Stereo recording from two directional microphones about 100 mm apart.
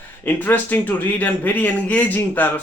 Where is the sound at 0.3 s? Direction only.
15° left (ahead or behind).